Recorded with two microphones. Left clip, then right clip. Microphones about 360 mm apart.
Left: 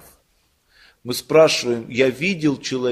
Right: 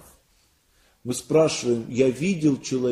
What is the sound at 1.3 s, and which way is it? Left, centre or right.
A man's voice, left.